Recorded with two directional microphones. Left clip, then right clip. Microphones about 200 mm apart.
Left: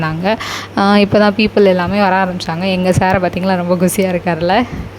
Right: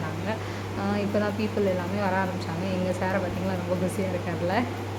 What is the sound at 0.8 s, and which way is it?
A woman's voice, 50° left (ahead or behind).